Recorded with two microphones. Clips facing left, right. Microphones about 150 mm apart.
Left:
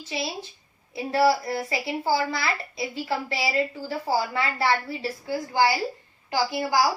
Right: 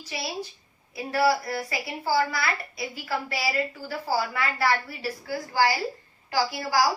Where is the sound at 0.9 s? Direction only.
25° left (ahead or behind).